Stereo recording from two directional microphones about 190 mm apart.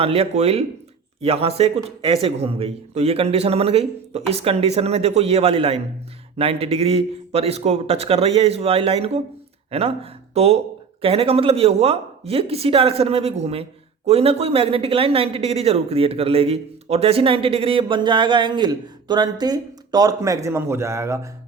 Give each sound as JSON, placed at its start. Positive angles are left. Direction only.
{"t": 0.0, "sound": "a man's voice", "side_deg": -30}